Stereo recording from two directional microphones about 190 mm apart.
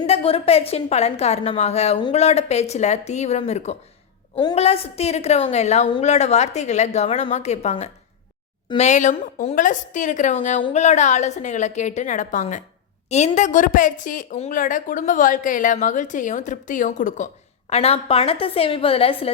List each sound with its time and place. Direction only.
0.1 s a woman's voice: 30° left (ahead or behind)